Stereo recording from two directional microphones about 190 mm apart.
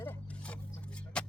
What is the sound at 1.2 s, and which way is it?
Music, 5° left (ahead or behind).